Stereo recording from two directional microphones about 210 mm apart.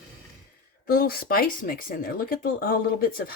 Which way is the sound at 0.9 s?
45° left (ahead or behind).